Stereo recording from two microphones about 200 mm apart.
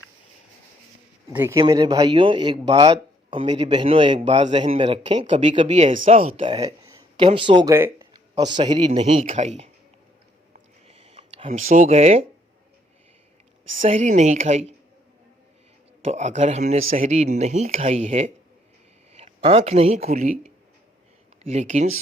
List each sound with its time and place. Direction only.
1.3 s speech: 10° right (ahead or behind)
7.7 s a man's voice: 10° right (ahead or behind); by 9.6 s 35° right (ahead or behind)
10.8 s a sound: 30° right (ahead or behind)
13.8 s speech: 35° right (ahead or behind)
16.1 s speech: 35° right (ahead or behind)